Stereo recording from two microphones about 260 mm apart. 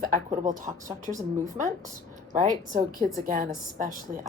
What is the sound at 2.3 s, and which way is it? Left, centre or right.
A woman's voice, right.